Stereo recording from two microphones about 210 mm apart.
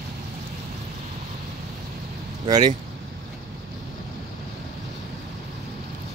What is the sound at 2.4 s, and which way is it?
Speech, 20° right (ahead or behind).